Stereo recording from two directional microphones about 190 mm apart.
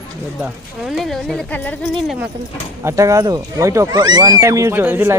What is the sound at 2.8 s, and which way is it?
Speech, 15° right (ahead or behind).